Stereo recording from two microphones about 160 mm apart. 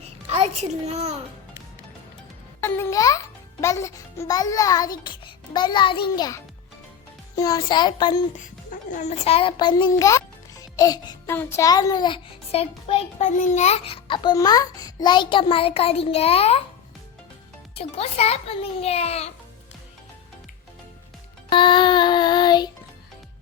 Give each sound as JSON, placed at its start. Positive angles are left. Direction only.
{"t": 0.0, "sound": "music", "side_deg": -40}
{"t": 2.6, "sound": "a child's voice", "side_deg": 15}
{"t": 8.7, "sound": "a child's voice", "side_deg": 50}
{"t": 17.7, "sound": "a child's voice", "side_deg": 40}
{"t": 21.5, "sound": "child singing", "side_deg": 30}